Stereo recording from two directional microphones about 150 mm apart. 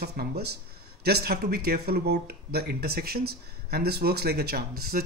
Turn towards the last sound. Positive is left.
turn(degrees=-90)